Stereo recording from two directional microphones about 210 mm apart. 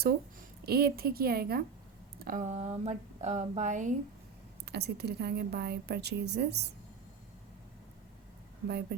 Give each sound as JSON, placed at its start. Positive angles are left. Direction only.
{"t": 0.6, "sound": "a woman's voice", "side_deg": -50}
{"t": 4.6, "sound": "a woman's voice", "side_deg": -50}
{"t": 8.6, "sound": "a woman's voice", "side_deg": -50}